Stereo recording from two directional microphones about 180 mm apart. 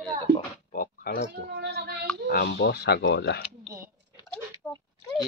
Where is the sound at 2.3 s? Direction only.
65° left (ahead or behind).